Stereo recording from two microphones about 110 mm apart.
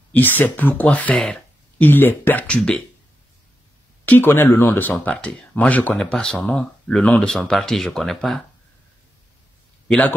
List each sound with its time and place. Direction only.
0.1 s speech: 15° left (ahead or behind)
4.0 s speech: 15° left (ahead or behind); by 8.4 s centre (ahead or behind)
9.8 s a man's voice: 15° left (ahead or behind)